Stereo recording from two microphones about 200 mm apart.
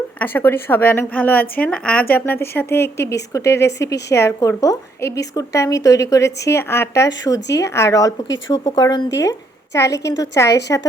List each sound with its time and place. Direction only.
0.2 s a woman's voice: 10° left (ahead or behind)